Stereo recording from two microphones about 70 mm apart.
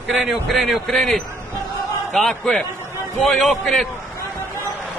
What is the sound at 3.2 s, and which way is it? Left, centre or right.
Speech, centre.